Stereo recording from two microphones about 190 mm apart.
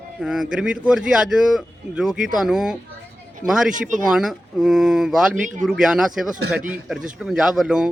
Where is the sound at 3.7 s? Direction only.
45° right (ahead or behind).